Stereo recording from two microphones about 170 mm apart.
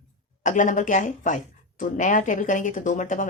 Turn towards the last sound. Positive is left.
turn(degrees=50)  # may be behind; listen again after turning